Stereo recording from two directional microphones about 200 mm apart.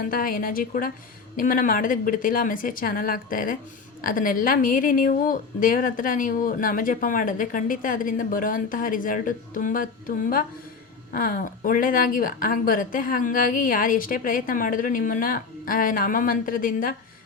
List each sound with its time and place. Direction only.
0.1 s speech: 45° left (ahead or behind)